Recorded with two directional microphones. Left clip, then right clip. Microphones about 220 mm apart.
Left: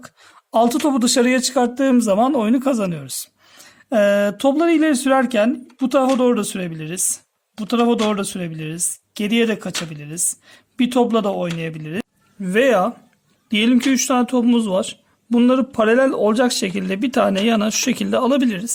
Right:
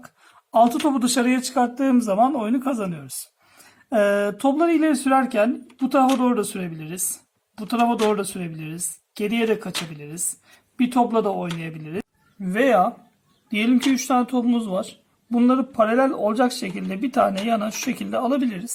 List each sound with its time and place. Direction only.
0.5 s a man's voice: 50° left (ahead or behind)